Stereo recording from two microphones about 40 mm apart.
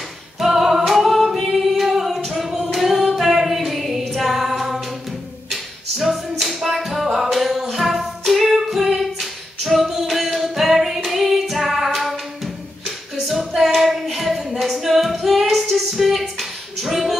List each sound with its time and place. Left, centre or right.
0.4 s a capella: centre
2.7 s singing: centre
4.1 s female singing: centre
5.9 s music: centre
8.2 s singing: centre
13.6 s female singing: centre